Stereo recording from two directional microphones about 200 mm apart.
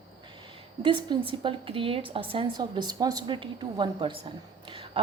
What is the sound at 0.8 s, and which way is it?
A woman's voice, 25° right (ahead or behind).